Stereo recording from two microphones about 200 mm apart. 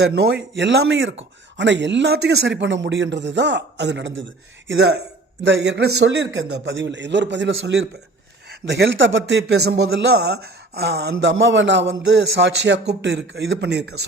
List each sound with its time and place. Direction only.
0.1 s speech: 50° right (ahead or behind)
0.5 s speech: 65° right (ahead or behind)
4.7 s speech: 55° right (ahead or behind)